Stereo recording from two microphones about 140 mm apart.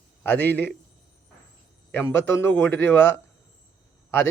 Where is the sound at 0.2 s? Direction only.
10° left (ahead or behind).